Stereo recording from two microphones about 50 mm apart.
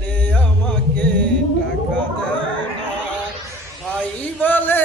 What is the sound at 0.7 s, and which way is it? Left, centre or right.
Music, centre.